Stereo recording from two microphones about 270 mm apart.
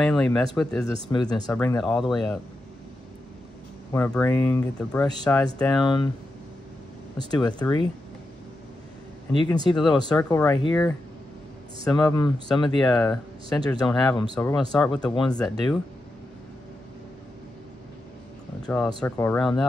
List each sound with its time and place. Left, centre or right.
0.0 s speech: centre
1.1 s speech: centre
3.9 s speech: centre
7.2 s speech: centre
9.3 s speech: centre
18.6 s speech: centre